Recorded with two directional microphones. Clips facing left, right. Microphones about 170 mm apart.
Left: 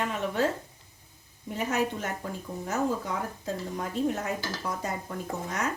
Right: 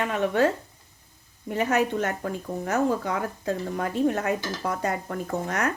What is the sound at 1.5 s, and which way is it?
A woman's voice, 65° right (ahead or behind).